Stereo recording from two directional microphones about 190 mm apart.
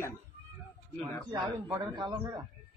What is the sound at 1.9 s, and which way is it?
Speech, 25° right (ahead or behind).